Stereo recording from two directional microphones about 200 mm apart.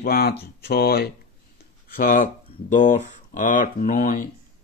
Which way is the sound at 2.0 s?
40° left (ahead or behind).